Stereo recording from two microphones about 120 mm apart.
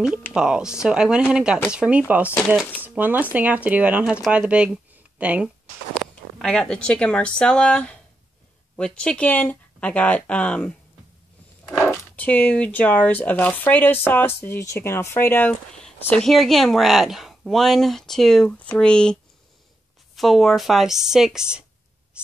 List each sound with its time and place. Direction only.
0.3 s speech: 5° right (ahead or behind)
6.3 s speech: 5° left (ahead or behind)
11.9 s a sound: 20° left (ahead or behind)
12.3 s speech: 10° left (ahead or behind)
15.8 s speech: 5° left (ahead or behind)
20.2 s speech: centre (ahead or behind)